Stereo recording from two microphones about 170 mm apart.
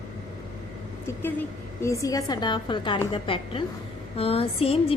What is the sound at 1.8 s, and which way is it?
A woman's voice, 20° left (ahead or behind).